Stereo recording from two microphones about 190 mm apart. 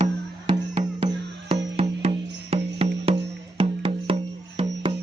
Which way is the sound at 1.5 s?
25° right (ahead or behind).